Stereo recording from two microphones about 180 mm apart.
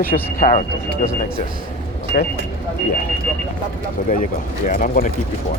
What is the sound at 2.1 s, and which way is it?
Speech, 50° left (ahead or behind).